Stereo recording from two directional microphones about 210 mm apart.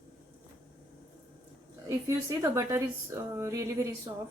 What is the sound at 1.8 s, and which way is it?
A woman's voice, 15° right (ahead or behind).